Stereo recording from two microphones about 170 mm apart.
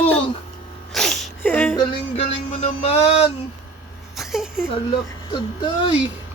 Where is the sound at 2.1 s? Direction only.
35° left (ahead or behind).